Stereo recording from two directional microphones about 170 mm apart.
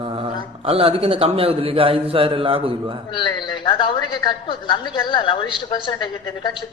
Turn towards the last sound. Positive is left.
turn(degrees=25)  # may be behind; listen again after turning